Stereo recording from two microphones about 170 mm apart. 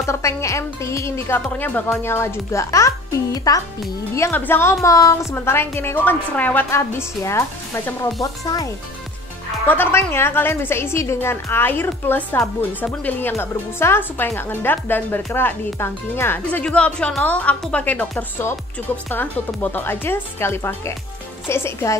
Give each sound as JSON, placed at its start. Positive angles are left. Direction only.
{"t": 0.0, "sound": "a woman's voice", "side_deg": 15}
{"t": 9.7, "sound": "a woman's voice", "side_deg": 10}